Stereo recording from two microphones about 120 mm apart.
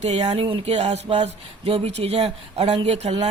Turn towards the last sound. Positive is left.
turn(degrees=-65)  # may be behind; listen again after turning